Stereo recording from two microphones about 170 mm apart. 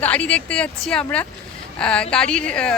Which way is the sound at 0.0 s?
10° left (ahead or behind).